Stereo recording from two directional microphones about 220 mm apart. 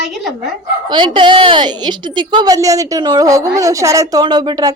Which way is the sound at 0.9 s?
20° right (ahead or behind).